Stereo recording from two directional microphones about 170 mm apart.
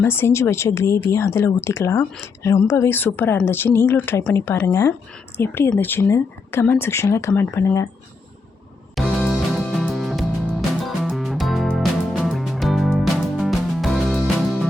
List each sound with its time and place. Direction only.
0.0 s speech: 15° left (ahead or behind)
9.0 s music: centre (ahead or behind)